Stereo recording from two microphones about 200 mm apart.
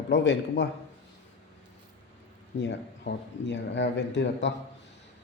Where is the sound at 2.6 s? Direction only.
60° left (ahead or behind).